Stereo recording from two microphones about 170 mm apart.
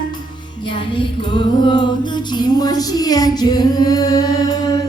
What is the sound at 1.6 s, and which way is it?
Female singing, 25° left (ahead or behind).